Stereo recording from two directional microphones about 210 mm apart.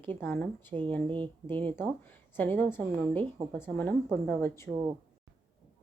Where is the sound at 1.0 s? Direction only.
20° right (ahead or behind).